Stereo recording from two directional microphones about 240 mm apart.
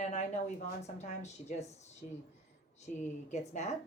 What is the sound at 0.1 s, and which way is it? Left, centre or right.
A woman's voice, left.